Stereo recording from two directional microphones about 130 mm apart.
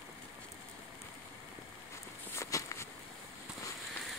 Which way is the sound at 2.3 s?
20° left (ahead or behind).